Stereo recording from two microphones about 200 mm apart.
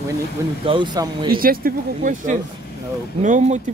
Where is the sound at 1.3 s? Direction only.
45° right (ahead or behind).